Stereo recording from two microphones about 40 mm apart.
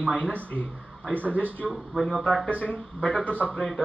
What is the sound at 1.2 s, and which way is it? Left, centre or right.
Speech, left.